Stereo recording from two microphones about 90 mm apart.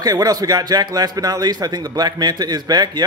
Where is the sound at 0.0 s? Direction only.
45° right (ahead or behind).